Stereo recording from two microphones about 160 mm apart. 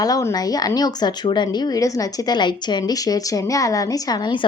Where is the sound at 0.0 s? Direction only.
20° left (ahead or behind).